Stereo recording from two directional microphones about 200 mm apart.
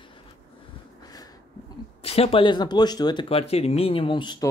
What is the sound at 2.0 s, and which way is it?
Speech, 30° left (ahead or behind).